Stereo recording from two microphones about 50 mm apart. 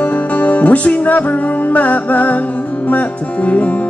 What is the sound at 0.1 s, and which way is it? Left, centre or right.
Music, left.